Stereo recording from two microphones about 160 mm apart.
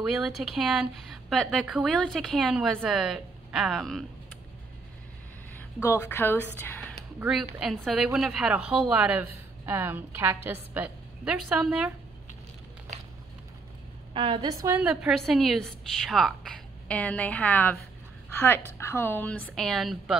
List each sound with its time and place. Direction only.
0.0 s speech: centre (ahead or behind)
5.8 s a woman's voice: 15° left (ahead or behind)
7.2 s a woman's voice: 5° right (ahead or behind)
14.1 s a woman's voice: 35° right (ahead or behind)
14.8 s speech: 5° right (ahead or behind); by 17.7 s 10° left (ahead or behind)
18.8 s a woman's voice: 15° left (ahead or behind); by 20.2 s centre (ahead or behind)